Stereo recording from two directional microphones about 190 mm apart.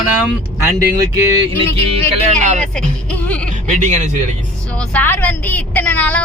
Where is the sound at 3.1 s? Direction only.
5° left (ahead or behind).